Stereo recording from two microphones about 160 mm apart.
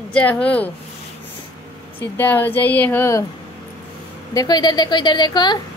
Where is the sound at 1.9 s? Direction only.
10° left (ahead or behind).